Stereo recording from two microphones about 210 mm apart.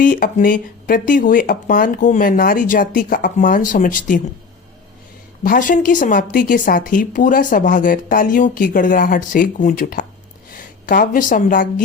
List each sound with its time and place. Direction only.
0.0 s a woman's voice: 40° left (ahead or behind)
5.4 s a woman's voice: 40° left (ahead or behind)